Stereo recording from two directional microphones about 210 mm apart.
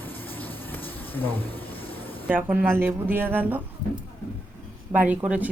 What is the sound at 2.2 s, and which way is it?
A woman's voice, 5° right (ahead or behind).